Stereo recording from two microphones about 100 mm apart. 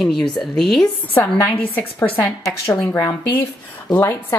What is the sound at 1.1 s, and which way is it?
Speech, 20° left (ahead or behind).